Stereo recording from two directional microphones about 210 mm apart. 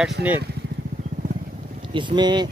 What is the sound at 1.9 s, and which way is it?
Speech, 20° right (ahead or behind).